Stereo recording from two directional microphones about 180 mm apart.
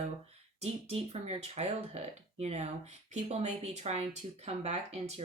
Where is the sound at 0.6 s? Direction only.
35° right (ahead or behind).